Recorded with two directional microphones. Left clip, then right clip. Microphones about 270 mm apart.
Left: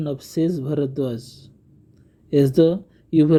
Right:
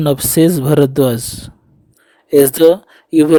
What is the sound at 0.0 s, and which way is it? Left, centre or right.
Speech, right.